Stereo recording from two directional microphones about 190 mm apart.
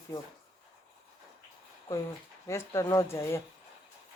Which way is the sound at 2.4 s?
15° left (ahead or behind).